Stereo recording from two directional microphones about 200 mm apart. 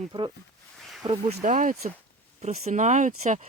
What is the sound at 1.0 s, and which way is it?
Speech, 30° right (ahead or behind).